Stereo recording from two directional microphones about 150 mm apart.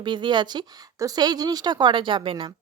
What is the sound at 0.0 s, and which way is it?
Speech, 30° right (ahead or behind).